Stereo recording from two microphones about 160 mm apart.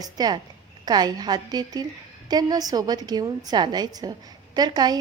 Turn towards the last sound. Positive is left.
turn(degrees=-25)  # may be behind; listen again after turning